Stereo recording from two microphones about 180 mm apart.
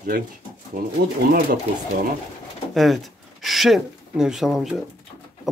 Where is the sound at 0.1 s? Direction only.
60° right (ahead or behind).